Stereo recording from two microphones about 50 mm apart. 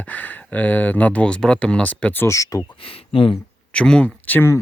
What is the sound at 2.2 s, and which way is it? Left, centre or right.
Speech, left.